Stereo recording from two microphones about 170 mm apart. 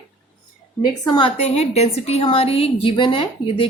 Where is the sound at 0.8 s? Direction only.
25° left (ahead or behind).